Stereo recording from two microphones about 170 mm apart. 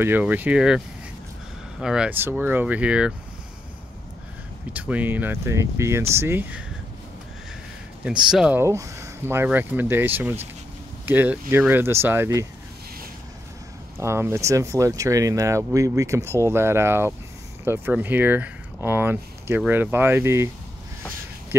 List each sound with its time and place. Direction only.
0.0 s speech: 10° right (ahead or behind)
4.7 s speech: 10° right (ahead or behind)
8.0 s speech: 5° right (ahead or behind)
13.9 s speech: 15° right (ahead or behind)